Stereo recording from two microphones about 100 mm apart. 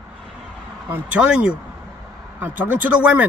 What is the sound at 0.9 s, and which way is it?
Speech, 10° right (ahead or behind).